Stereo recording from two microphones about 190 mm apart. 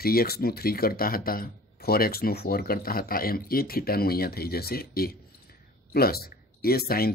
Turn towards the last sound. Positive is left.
turn(degrees=55)  # may be behind; listen again after turning